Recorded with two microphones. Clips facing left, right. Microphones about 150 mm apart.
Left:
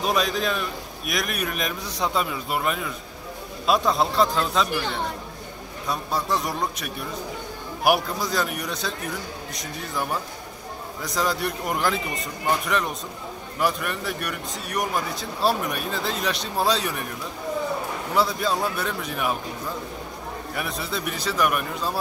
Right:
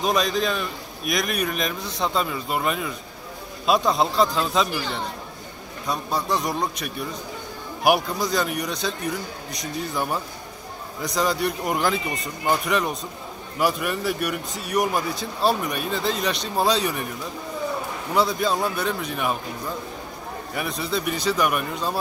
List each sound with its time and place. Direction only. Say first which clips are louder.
0.0 s a man's voice: right 1 dB; 5° left (ahead or behind)
5.9 s a man's voice: right 1 dB; 5° left (ahead or behind)
11.0 s a man's voice: right 2 dB; centre (ahead or behind)
18.1 s a man's voice: right 2 dB; centre (ahead or behind)
20.5 s a man's voice: right 4 dB; centre (ahead or behind)